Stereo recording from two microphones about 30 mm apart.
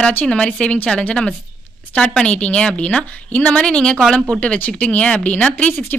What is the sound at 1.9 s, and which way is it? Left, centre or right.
Speech, left.